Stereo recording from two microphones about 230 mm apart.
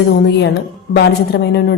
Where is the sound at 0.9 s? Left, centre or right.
Left.